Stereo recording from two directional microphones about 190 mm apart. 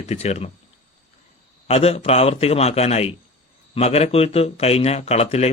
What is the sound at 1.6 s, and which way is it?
Speech, 30° left (ahead or behind).